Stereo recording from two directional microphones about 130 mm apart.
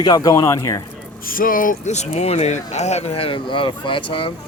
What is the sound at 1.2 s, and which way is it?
Speech, 90° left.